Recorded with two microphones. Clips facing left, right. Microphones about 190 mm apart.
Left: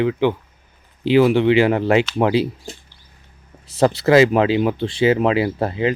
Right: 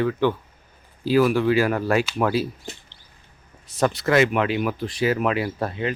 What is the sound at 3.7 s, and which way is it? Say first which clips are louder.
Speech: left 6 dB; 30° left (ahead or behind).